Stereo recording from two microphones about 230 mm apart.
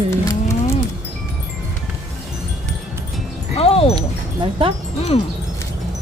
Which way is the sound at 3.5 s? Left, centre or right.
Left.